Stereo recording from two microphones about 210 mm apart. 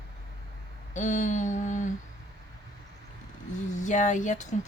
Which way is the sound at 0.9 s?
35° left (ahead or behind).